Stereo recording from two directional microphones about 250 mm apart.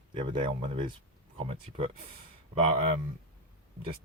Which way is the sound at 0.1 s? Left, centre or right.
Centre.